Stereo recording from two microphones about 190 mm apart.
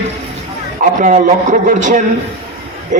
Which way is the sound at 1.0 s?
40° right (ahead or behind).